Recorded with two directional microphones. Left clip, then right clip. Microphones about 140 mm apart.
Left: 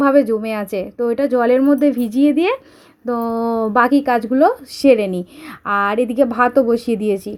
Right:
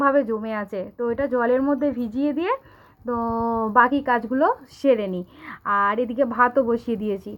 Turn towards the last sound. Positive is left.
turn(degrees=30)  # may be behind; listen again after turning